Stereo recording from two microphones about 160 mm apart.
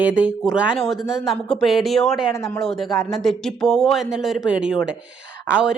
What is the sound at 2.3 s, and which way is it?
Speech, 20° left (ahead or behind).